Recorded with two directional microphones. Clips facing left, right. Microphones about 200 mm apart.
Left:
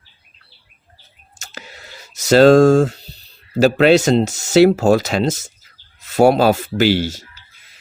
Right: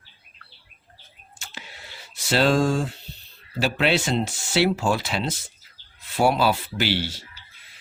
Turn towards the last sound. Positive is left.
turn(degrees=45)  # may be behind; listen again after turning